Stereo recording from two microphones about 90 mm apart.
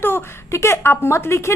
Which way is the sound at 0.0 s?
30° left (ahead or behind).